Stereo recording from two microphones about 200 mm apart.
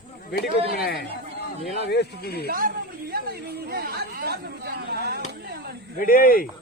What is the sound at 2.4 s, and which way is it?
Chatter, 50° right (ahead or behind).